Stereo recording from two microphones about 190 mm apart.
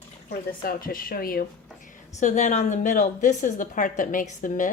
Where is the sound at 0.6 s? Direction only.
50° left (ahead or behind).